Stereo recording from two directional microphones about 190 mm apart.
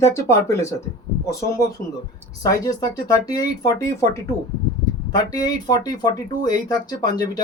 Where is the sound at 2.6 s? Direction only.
20° left (ahead or behind).